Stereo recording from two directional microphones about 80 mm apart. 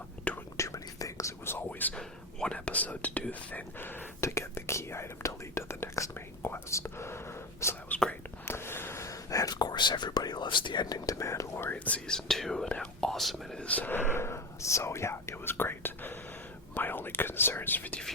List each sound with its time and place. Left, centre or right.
0.5 s whispering: left
1.5 s whispering: left
2.0 s speech: centre; by 7.2 s left
7.9 s whispering: centre
8.4 s whispering: left
11.7 s speech: centre
13.6 s speech: centre